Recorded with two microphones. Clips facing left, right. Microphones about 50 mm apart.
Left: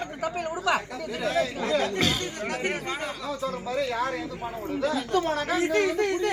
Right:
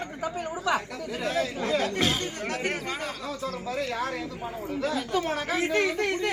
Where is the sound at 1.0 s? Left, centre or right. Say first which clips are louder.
Left 2 dB; centre.